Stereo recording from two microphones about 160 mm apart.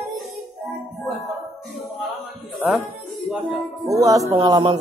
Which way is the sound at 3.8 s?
20° right (ahead or behind).